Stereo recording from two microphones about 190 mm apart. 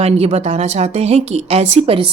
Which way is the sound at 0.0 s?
35° right (ahead or behind).